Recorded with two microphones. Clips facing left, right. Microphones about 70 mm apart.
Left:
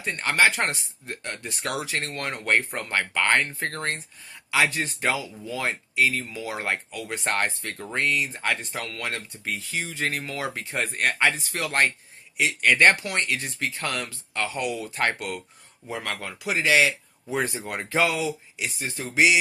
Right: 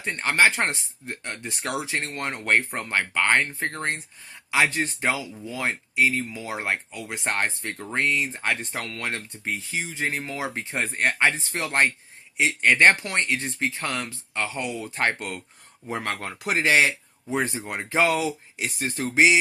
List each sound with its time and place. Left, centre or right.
0.0 s speech: right
18.1 s speech: right
19.1 s speech: right